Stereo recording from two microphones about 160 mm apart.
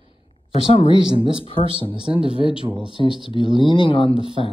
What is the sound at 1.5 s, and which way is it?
Speech, 30° right (ahead or behind).